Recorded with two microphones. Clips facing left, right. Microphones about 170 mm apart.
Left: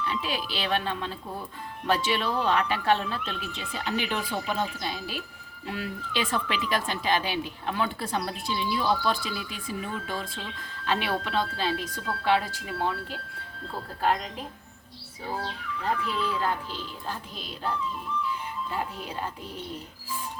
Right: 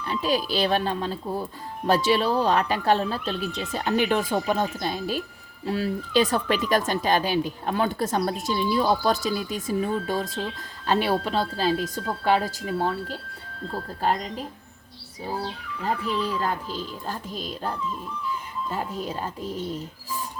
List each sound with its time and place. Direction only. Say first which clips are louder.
0.0 s speech: right 6 dB; 40° right (ahead or behind)
16.2 s speech: right 2 dB; 40° right (ahead or behind)
18.3 s speech: right 2 dB; 40° right (ahead or behind)